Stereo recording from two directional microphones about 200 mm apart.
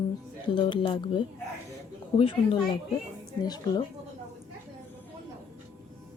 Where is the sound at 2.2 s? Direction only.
25° left (ahead or behind).